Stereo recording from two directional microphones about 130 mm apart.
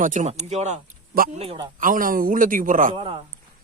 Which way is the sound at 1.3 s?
50° right (ahead or behind).